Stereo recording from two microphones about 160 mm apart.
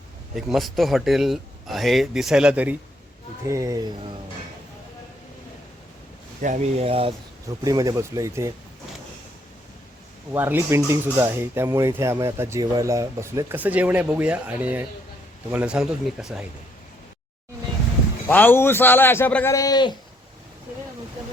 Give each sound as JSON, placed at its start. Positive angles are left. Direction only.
{"t": 0.3, "sound": "a man's voice", "side_deg": 0}
{"t": 3.4, "sound": "speech", "side_deg": -20}
{"t": 6.4, "sound": "speech", "side_deg": -50}
{"t": 7.4, "sound": "speech", "side_deg": -20}
{"t": 10.3, "sound": "a man's voice", "side_deg": -15}
{"t": 18.3, "sound": "a man's voice", "side_deg": 10}